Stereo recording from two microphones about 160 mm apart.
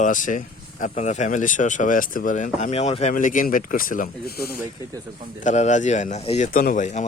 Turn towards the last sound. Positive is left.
turn(degrees=50)  # may be behind; listen again after turning